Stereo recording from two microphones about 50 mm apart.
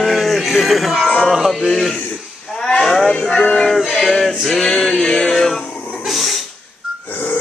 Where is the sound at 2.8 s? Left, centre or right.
Centre.